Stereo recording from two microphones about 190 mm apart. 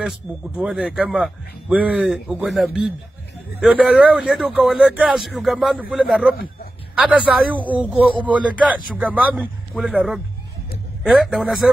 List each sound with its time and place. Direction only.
0.3 s a man's voice: centre (ahead or behind)